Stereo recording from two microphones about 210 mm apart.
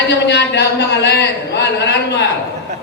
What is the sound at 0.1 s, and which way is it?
A man's voice, 55° left (ahead or behind).